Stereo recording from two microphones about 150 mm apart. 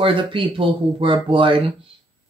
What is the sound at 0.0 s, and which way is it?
Speech, 35° right (ahead or behind).